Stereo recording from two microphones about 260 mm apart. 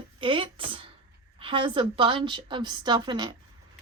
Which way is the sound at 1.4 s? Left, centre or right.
Centre.